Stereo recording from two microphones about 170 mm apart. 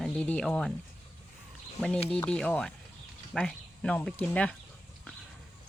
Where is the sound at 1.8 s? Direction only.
5° left (ahead or behind).